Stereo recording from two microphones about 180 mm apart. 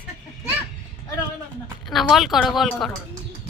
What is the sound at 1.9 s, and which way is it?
A woman's voice, centre (ahead or behind).